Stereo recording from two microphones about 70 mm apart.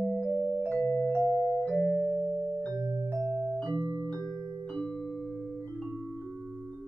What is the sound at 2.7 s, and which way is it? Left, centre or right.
Music, right.